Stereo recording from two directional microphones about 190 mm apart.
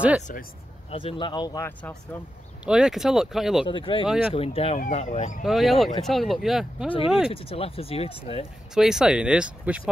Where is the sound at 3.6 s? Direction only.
25° left (ahead or behind).